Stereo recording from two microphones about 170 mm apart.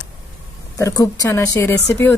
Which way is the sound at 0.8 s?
20° left (ahead or behind).